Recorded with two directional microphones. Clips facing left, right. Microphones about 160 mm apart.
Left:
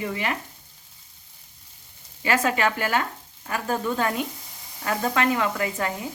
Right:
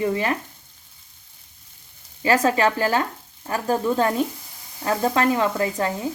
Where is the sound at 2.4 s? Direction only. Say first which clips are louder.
Right 4 dB; 35° right (ahead or behind).